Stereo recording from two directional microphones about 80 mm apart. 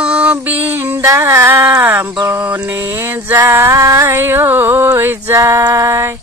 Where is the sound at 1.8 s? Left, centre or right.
Right.